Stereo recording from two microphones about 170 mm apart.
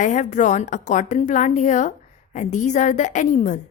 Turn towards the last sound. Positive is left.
turn(degrees=45)  # may be behind; listen again after turning